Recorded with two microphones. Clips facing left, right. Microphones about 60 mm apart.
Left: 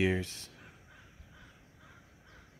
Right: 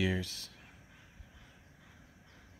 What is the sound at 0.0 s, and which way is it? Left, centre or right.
Speech, left.